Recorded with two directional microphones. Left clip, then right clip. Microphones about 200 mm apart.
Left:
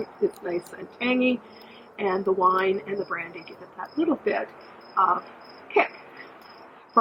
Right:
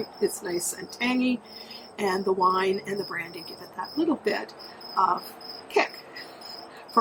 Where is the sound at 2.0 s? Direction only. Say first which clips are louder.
Left 1 dB; 25° right (ahead or behind).